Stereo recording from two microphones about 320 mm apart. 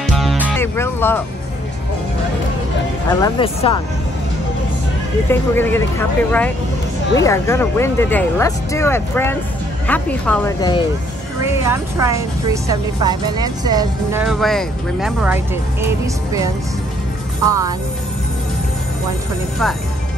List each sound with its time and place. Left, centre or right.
0.0 s music: centre
3.1 s speech: centre
5.3 s speech: centre
11.6 s a woman's voice: centre
17.5 s a woman's voice: centre